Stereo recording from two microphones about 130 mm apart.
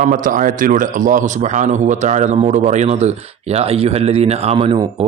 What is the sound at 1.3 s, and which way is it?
A man's voice, 70° right (ahead or behind).